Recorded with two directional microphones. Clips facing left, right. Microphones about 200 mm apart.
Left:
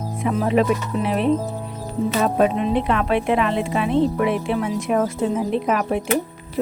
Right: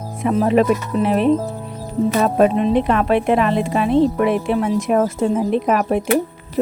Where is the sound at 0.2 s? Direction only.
45° right (ahead or behind).